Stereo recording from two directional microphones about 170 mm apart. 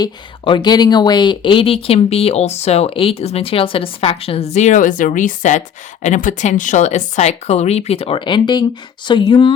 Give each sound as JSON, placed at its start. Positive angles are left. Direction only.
{"t": 0.0, "sound": "speech", "side_deg": 25}